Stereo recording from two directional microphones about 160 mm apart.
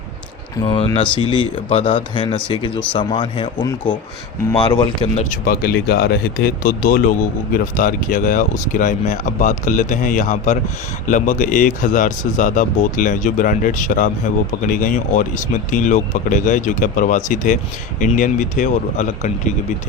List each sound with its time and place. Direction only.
0.5 s speech: 25° left (ahead or behind)
5.1 s speech: 45° left (ahead or behind)
5.5 s speech: 75° left (ahead or behind); by 19.5 s 50° left (ahead or behind)